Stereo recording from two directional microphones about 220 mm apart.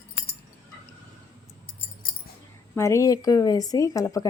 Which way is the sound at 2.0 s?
40° left (ahead or behind).